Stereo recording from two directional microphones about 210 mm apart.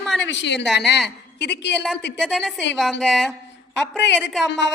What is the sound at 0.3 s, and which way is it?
Speech, 55° left (ahead or behind).